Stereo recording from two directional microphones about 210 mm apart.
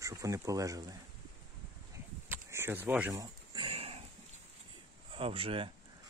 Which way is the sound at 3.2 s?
25° right (ahead or behind).